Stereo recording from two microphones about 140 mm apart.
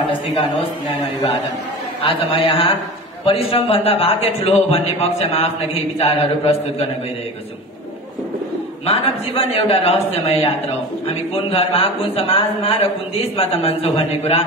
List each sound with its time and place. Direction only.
2.0 s a man's voice: 40° left (ahead or behind)
8.8 s a man's voice: 45° left (ahead or behind)